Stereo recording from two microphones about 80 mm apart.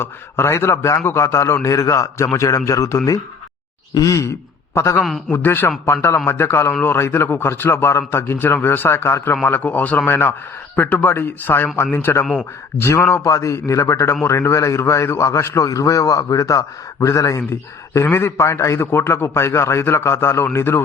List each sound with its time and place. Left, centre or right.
0.0 s a man's voice: left
12.2 s a man's voice: centre
12.8 s a man's voice: left
13.2 s a man's voice: left
17.9 s a man's voice: left